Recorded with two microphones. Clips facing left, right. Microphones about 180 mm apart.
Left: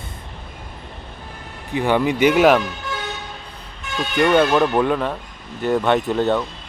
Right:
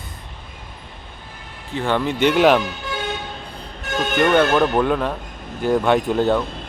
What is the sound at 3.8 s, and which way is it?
Music, 45° right (ahead or behind).